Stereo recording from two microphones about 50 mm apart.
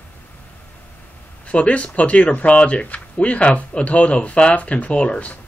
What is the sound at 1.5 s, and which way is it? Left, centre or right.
Speech, left.